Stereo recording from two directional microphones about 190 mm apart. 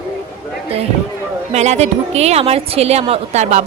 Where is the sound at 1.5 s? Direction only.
35° right (ahead or behind).